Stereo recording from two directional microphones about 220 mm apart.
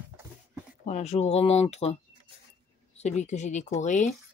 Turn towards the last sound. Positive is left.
turn(degrees=30)  # may be behind; listen again after turning